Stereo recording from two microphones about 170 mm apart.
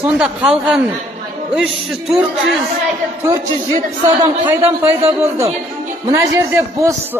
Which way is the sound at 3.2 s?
25° right (ahead or behind).